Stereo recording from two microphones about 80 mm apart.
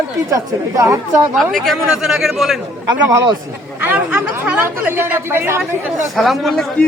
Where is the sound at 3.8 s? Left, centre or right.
Right.